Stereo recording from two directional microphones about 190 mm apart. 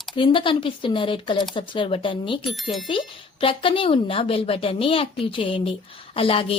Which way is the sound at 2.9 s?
25° left (ahead or behind).